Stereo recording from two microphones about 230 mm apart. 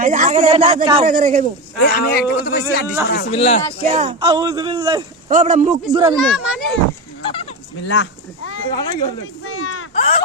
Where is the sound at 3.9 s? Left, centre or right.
Right.